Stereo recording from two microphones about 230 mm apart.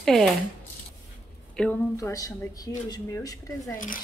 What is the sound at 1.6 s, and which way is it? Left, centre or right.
Speech, centre.